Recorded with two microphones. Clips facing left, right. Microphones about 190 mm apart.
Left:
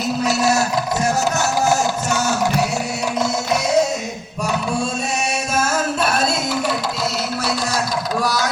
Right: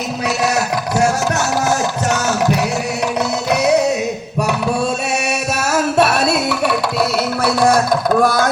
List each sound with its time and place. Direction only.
5.7 s music: 70° right (ahead or behind)